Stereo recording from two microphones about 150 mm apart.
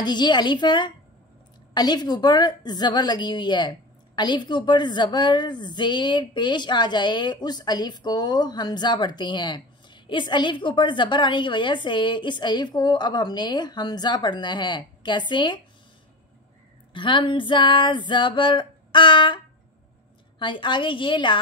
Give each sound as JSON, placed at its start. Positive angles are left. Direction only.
{"t": 0.0, "sound": "a woman's voice", "side_deg": 30}
{"t": 16.9, "sound": "female singing", "side_deg": 35}